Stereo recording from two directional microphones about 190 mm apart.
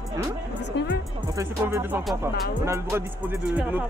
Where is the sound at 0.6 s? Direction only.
65° left (ahead or behind).